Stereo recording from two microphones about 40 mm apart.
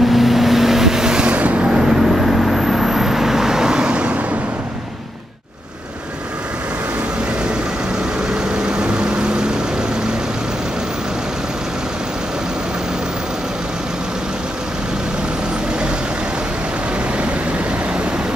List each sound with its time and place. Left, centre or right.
0.0 s vehicle: centre
1.2 s vehicle: right
8.4 s vehicle: centre